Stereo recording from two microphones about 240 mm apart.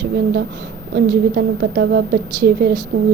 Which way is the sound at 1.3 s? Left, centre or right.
Right.